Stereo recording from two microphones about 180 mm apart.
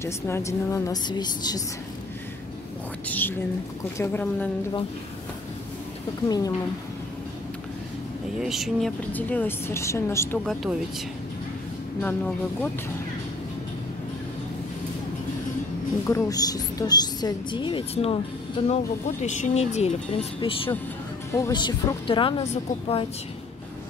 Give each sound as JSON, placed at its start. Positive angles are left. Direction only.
{"t": 0.0, "sound": "speech", "side_deg": 15}
{"t": 3.1, "sound": "speech", "side_deg": 10}
{"t": 6.2, "sound": "a woman's voice", "side_deg": 20}
{"t": 8.4, "sound": "speech", "side_deg": 0}
{"t": 9.1, "sound": "speech", "side_deg": 10}
{"t": 10.4, "sound": "speech", "side_deg": 0}
{"t": 16.1, "sound": "a woman's voice", "side_deg": 20}
{"t": 18.7, "sound": "speech", "side_deg": 40}
{"t": 21.3, "sound": "a woman's voice", "side_deg": 20}